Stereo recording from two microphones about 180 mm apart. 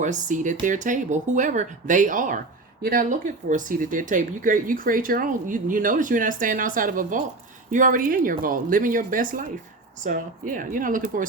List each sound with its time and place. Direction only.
0.0 s speech: 45° right (ahead or behind)